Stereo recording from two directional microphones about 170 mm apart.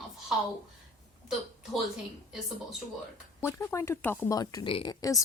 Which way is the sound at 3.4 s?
15° left (ahead or behind).